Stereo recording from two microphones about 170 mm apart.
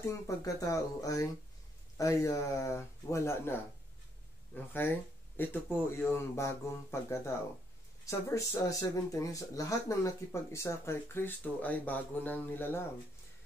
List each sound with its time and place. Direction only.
0.0 s speech: 20° left (ahead or behind)
4.6 s speech: 10° left (ahead or behind)